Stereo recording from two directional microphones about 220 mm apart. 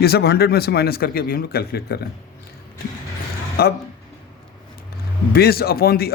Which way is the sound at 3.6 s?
45° left (ahead or behind).